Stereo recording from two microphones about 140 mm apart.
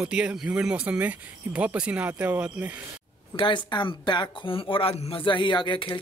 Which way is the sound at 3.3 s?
35° left (ahead or behind).